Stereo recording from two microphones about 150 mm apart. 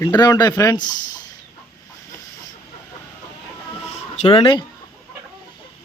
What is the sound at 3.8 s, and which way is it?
Music, 45° left (ahead or behind).